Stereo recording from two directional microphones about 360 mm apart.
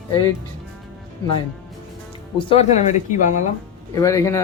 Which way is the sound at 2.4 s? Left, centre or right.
Centre.